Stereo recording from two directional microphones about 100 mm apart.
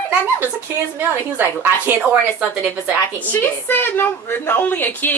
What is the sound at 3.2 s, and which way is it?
A woman's voice, 20° left (ahead or behind).